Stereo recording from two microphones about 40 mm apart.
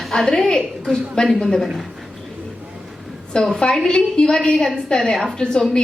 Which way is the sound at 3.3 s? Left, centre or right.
Left.